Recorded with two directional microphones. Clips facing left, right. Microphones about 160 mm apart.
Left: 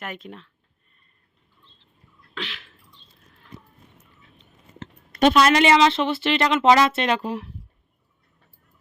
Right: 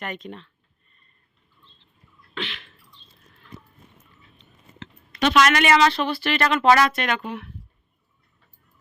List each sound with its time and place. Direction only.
0.0 s a sound: 5° left (ahead or behind)
2.3 s bird: centre (ahead or behind)
5.4 s speech: 30° left (ahead or behind)